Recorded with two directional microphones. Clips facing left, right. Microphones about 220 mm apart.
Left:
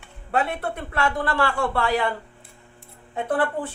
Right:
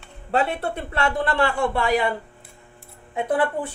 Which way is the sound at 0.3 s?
30° right (ahead or behind).